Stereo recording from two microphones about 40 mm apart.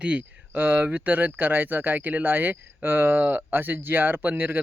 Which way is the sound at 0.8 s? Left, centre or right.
Right.